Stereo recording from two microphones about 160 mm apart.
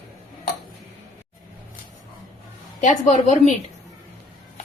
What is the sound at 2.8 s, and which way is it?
Speech, 50° left (ahead or behind).